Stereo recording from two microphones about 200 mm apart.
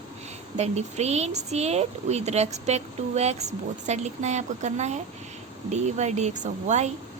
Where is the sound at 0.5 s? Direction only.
35° right (ahead or behind).